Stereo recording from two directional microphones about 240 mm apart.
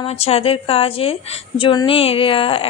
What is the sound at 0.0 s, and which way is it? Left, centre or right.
A woman's voice, left.